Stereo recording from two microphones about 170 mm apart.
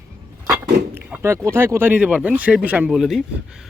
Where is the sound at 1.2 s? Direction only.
15° right (ahead or behind).